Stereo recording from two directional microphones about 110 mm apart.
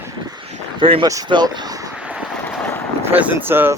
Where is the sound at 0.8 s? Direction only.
50° right (ahead or behind).